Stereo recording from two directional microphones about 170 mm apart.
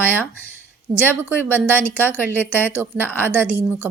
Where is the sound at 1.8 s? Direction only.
10° left (ahead or behind).